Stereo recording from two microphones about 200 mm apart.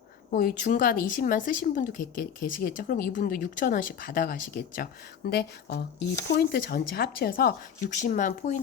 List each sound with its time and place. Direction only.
0.3 s a woman's voice: 45° left (ahead or behind)